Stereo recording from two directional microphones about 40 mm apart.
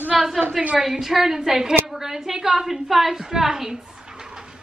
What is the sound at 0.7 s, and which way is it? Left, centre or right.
Speech, centre.